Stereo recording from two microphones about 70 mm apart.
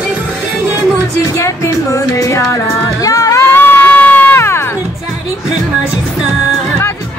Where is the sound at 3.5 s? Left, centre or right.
Left.